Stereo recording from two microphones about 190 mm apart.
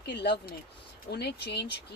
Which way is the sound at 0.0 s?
60° left (ahead or behind).